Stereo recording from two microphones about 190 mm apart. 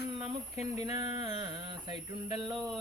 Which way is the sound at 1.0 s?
20° right (ahead or behind).